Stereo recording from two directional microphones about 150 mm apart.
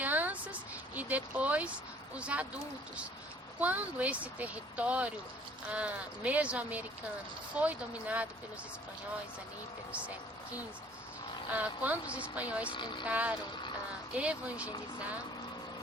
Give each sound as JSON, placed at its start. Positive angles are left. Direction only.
{"t": 0.0, "sound": "a sound", "side_deg": -10}
{"t": 0.9, "sound": "speech", "side_deg": -10}
{"t": 3.6, "sound": "speech", "side_deg": -10}
{"t": 11.5, "sound": "speech", "side_deg": -10}
{"t": 12.7, "sound": "speech", "side_deg": 30}
{"t": 13.1, "sound": "speech", "side_deg": -10}